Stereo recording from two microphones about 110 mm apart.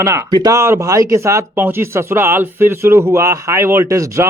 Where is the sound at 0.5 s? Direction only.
25° right (ahead or behind).